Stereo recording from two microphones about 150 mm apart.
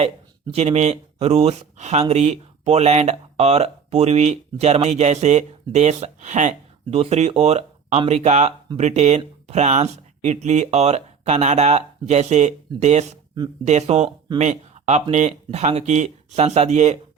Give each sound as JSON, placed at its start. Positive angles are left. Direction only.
{"t": 0.5, "sound": "speech", "side_deg": -45}